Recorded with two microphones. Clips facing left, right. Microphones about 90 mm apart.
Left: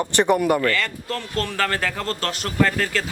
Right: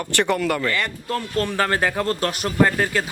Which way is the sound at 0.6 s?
15° right (ahead or behind).